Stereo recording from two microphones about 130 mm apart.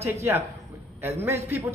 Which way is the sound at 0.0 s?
20° right (ahead or behind).